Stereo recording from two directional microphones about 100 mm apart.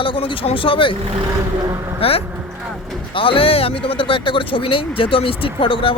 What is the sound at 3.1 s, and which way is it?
Speech, 60° left (ahead or behind).